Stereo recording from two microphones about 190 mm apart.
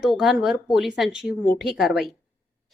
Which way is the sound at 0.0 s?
Centre (ahead or behind).